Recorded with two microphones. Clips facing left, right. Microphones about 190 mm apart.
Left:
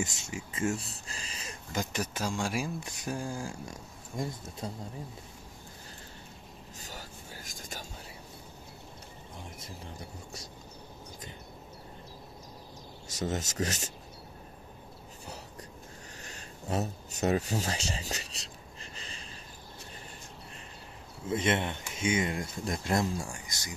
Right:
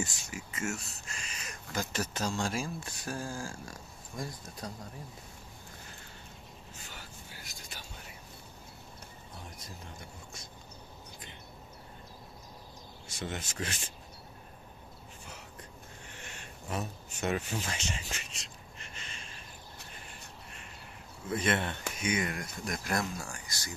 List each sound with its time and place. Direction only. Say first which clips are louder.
0.0 s speech: left 2 dB; 25° left (ahead or behind)
1.8 s speech: left 1 dB; 15° left (ahead or behind)
6.8 s vehicle: left 6 dB; 40° left (ahead or behind)
7.5 s a sound: left 7 dB; 45° left (ahead or behind)
9.6 s speech: left 3 dB; 35° left (ahead or behind)
13.1 s speech: left 6 dB; 40° left (ahead or behind)
16.2 s a sound: even; 35° left (ahead or behind)
21.3 s speech: left 2 dB; 20° left (ahead or behind)